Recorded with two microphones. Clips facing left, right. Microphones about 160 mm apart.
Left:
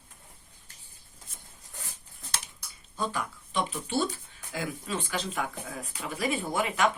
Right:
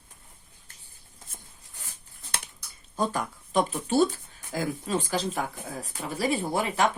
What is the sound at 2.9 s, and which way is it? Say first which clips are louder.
Speech: right 4 dB; 45° right (ahead or behind).